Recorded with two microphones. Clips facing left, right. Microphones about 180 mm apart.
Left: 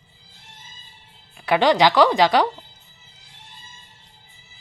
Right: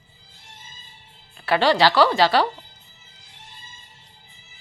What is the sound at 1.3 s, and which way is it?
Speech, 15° left (ahead or behind).